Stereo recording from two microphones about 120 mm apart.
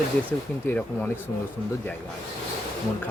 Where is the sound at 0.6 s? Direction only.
15° left (ahead or behind).